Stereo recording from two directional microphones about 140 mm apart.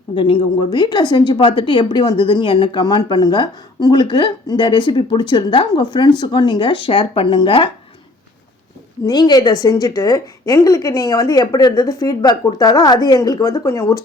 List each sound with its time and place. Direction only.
0.2 s a woman's voice: 40° left (ahead or behind)
9.0 s a woman's voice: 30° left (ahead or behind)